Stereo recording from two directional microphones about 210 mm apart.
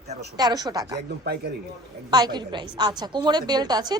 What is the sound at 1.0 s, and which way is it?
Speech, 50° right (ahead or behind).